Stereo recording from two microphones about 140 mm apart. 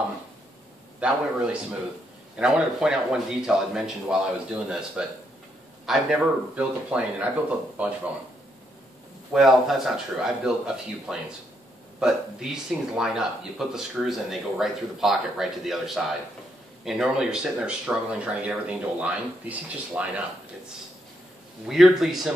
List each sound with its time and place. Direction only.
1.0 s speech: 10° right (ahead or behind)
9.3 s speech: centre (ahead or behind)
21.6 s speech: 5° right (ahead or behind)